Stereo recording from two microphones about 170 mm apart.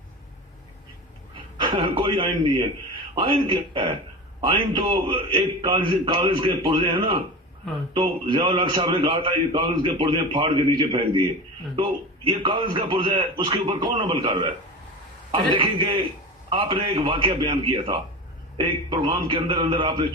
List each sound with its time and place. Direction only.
1.5 s a man's voice: 30° right (ahead or behind)
12.4 s a man's voice: 30° right (ahead or behind)